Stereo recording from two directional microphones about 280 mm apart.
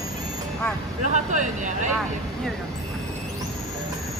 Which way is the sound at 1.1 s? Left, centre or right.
Right.